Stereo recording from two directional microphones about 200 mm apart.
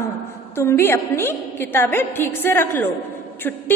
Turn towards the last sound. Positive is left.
turn(degrees=10)  # may be behind; listen again after turning